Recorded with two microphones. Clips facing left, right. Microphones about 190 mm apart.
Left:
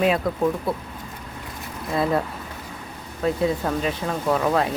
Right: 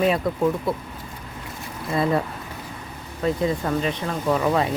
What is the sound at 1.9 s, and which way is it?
Speech, centre (ahead or behind).